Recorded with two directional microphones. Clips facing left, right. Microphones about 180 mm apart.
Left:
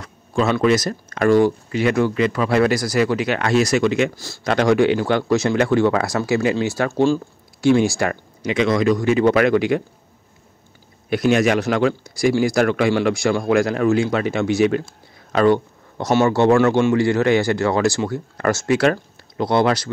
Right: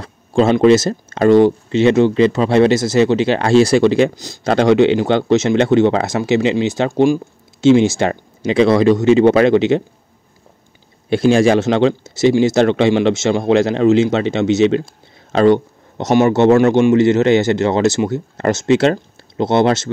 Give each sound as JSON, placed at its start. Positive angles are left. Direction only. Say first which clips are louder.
{"t": 0.0, "sound": "speech", "louder": "right 6 dB", "side_deg": -30}
{"t": 4.1, "sound": "speech", "louder": "right 5 dB", "side_deg": -20}
{"t": 11.1, "sound": "speech", "louder": "right 5 dB", "side_deg": -30}